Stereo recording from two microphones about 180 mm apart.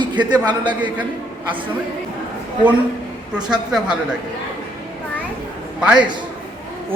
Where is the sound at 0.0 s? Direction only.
25° right (ahead or behind).